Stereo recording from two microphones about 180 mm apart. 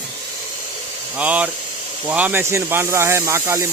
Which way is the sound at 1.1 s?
10° right (ahead or behind).